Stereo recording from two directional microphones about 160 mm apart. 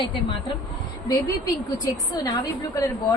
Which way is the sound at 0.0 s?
30° left (ahead or behind).